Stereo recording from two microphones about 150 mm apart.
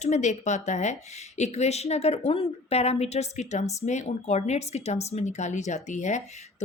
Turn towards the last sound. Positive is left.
turn(degrees=55)  # may be behind; listen again after turning